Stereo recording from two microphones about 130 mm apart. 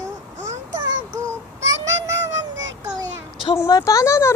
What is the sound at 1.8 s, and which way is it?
Child singing, 25° right (ahead or behind).